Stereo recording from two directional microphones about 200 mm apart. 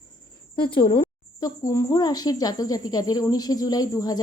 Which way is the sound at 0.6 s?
25° left (ahead or behind).